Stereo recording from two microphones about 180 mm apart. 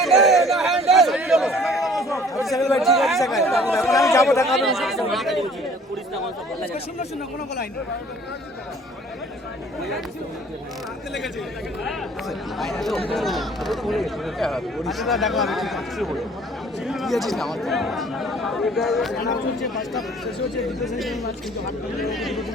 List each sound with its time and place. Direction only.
0.0 s a sound: centre (ahead or behind)
2.4 s speech: centre (ahead or behind)
3.7 s speech: 15° left (ahead or behind)
4.4 s speech: centre (ahead or behind)
12.5 s speech: centre (ahead or behind)